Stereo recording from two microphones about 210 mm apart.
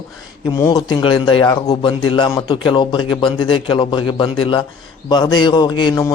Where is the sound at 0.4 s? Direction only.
15° left (ahead or behind).